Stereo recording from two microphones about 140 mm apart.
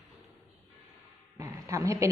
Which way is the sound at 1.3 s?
20° right (ahead or behind).